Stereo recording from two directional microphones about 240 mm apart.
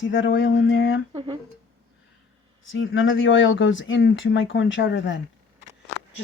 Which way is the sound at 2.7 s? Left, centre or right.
Left.